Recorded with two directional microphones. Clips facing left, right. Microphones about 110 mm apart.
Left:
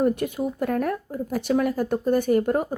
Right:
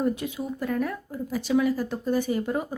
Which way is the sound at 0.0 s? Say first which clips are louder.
Left 5 dB; 55° left (ahead or behind).